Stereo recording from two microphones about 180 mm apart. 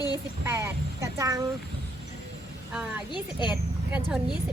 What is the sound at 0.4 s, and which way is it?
Speech, 15° right (ahead or behind).